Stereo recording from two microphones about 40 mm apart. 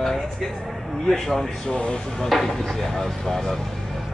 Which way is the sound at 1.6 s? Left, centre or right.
Left.